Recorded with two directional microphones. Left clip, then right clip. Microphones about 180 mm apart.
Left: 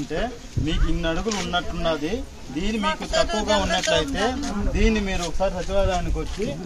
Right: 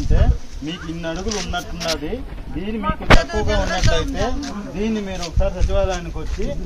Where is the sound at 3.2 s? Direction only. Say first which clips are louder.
Left 1 dB; 10° right (ahead or behind).